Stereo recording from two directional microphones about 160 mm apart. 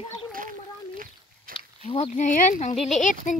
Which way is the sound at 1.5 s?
60° right (ahead or behind).